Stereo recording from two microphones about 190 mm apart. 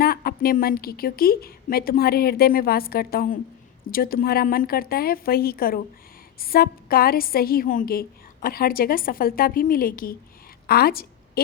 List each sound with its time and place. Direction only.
0.0 s a woman's voice: 50° left (ahead or behind)